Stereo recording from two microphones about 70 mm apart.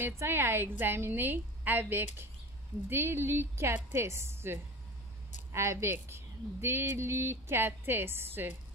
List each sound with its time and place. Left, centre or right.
0.0 s a woman's voice: right